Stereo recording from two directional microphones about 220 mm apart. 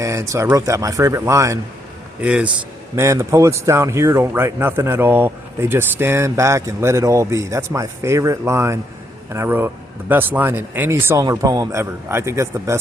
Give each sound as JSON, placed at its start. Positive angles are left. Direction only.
{"t": 0.0, "sound": "a man's voice", "side_deg": -15}